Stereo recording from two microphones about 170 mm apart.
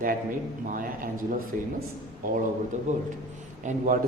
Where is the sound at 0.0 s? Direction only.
55° right (ahead or behind).